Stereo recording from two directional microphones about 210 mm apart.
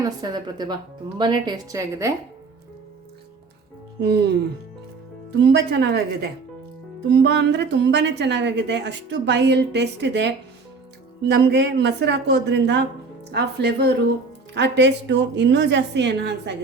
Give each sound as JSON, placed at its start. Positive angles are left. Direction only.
{"t": 0.0, "sound": "a woman's voice", "side_deg": -20}
{"t": 4.0, "sound": "a woman's voice", "side_deg": -50}
{"t": 5.4, "sound": "a woman's voice", "side_deg": -55}
{"t": 7.1, "sound": "a woman's voice", "side_deg": -55}